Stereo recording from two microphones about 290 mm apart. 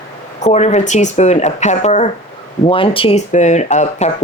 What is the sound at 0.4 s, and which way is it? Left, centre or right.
Speech, left.